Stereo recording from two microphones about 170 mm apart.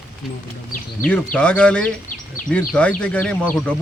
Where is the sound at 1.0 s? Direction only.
5° left (ahead or behind).